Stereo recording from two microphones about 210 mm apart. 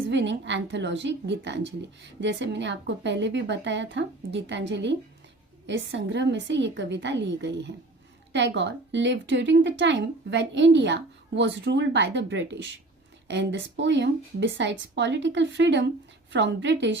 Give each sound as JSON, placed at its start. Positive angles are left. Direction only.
{"t": 0.1, "sound": "speech", "side_deg": -60}